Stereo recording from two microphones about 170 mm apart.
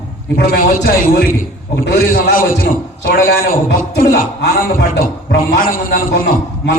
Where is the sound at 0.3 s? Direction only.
70° left (ahead or behind).